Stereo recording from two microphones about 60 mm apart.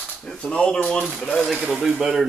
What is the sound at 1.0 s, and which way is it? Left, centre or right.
Speech, centre.